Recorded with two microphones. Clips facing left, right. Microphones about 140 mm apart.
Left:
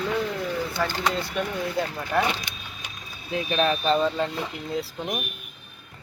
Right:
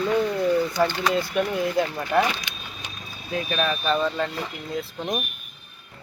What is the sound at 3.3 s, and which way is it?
Speech, 30° left (ahead or behind).